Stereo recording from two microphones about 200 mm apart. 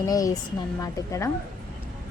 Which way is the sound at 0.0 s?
15° left (ahead or behind).